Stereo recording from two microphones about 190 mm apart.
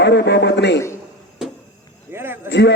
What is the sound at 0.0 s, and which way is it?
Speech, 65° left (ahead or behind).